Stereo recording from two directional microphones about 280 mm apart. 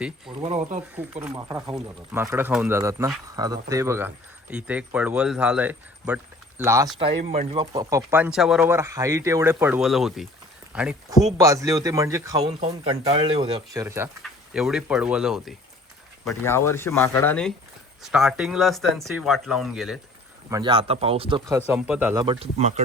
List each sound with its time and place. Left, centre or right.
0.3 s speech: right
1.3 s speech: centre
20.5 s speech: centre
21.7 s speech: centre; by 22.8 s right